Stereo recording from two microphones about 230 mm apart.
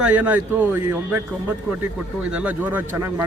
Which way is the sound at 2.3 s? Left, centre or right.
Centre.